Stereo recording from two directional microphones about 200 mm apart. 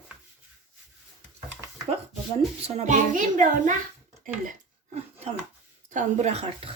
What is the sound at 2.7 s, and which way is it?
A child's voice, 40° right (ahead or behind).